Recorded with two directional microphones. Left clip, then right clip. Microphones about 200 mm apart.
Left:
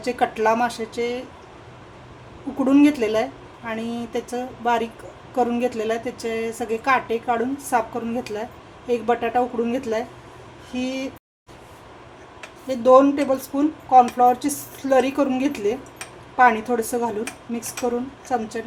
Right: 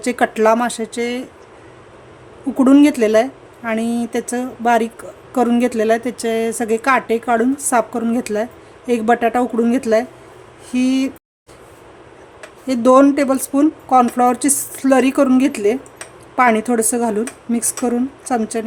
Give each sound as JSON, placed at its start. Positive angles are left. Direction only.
{"t": 0.0, "sound": "a woman's voice", "side_deg": -45}
{"t": 2.6, "sound": "a woman's voice", "side_deg": -45}
{"t": 12.6, "sound": "a woman's voice", "side_deg": -55}